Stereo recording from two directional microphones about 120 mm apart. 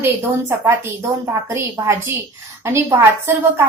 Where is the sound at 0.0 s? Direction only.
20° right (ahead or behind).